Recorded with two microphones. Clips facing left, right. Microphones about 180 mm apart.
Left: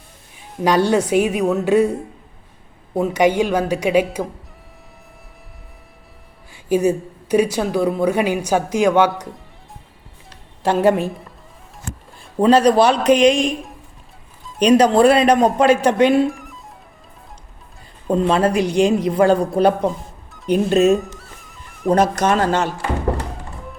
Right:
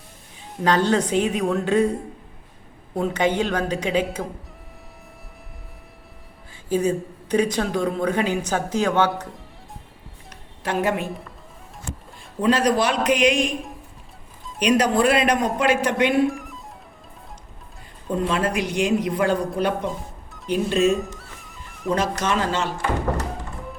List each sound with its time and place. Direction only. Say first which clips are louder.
0.6 s speech: left 4 dB; 10° left (ahead or behind)
3.0 s speech: left 5 dB; 10° left (ahead or behind)
6.5 s speech: left 5 dB; 10° left (ahead or behind)
10.6 s a woman's voice: left 8 dB; 30° left (ahead or behind)
11.0 s a woman's voice: left 5 dB; centre (ahead or behind)
12.4 s speech: left 7 dB; 30° left (ahead or behind)
14.6 s speech: left 6 dB; 35° left (ahead or behind)
16.3 s music: right 2 dB; centre (ahead or behind)
18.3 s speech: left 7 dB; 30° left (ahead or behind)
19.9 s music: left 1 dB; centre (ahead or behind)
22.2 s speech: left 6 dB; 45° left (ahead or behind)